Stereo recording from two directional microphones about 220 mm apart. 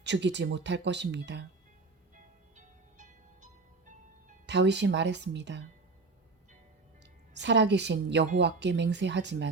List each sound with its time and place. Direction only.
0.0 s speech: 55° right (ahead or behind)
2.1 s music: 35° right (ahead or behind)
4.4 s speech: 50° right (ahead or behind)
7.3 s speech: 50° right (ahead or behind)